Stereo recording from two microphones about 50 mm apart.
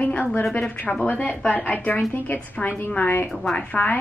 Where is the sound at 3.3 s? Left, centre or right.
Centre.